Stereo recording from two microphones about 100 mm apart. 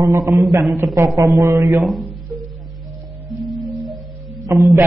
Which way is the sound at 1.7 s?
Centre (ahead or behind).